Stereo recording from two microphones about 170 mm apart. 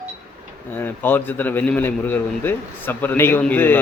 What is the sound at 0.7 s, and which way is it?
A man's voice, 10° left (ahead or behind).